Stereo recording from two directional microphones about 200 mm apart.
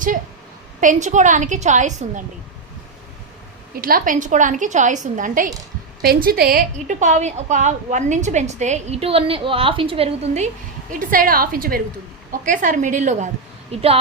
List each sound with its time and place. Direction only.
0.8 s a woman's voice: 40° right (ahead or behind)
3.8 s a woman's voice: 45° right (ahead or behind)
10.9 s a woman's voice: 45° right (ahead or behind)